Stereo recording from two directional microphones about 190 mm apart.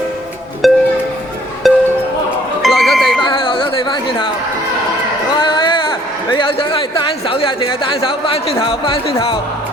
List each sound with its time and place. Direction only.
0.6 s music: centre (ahead or behind)
3.2 s a sound: 25° left (ahead or behind)
5.3 s a man's voice: 25° left (ahead or behind)